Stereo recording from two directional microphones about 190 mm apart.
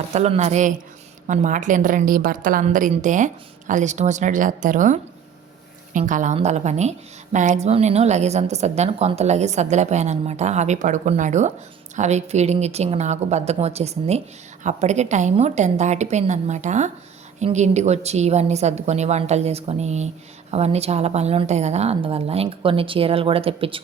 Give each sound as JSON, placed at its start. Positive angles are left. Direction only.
{"t": 0.1, "sound": "a woman's voice", "side_deg": -35}